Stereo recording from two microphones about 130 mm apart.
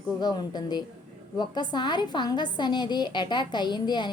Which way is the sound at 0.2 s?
30° left (ahead or behind).